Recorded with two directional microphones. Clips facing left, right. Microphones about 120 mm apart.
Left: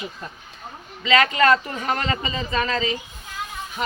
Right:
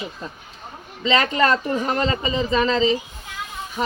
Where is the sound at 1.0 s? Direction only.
30° right (ahead or behind).